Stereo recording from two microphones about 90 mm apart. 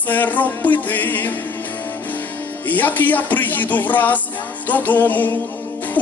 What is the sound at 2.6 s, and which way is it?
Speech, 20° left (ahead or behind).